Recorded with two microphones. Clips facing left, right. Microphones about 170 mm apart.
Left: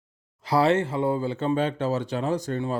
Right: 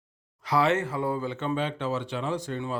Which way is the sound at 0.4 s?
35° left (ahead or behind).